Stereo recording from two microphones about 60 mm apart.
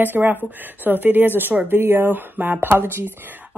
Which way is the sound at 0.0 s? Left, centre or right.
Right.